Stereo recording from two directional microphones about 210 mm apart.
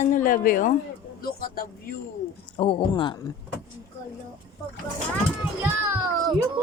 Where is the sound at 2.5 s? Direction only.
25° left (ahead or behind).